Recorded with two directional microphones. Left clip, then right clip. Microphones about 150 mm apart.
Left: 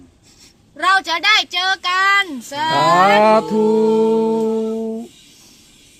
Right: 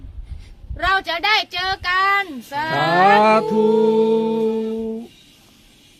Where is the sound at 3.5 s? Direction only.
5° right (ahead or behind).